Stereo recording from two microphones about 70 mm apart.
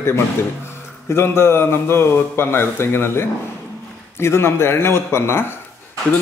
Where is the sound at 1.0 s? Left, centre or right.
Left.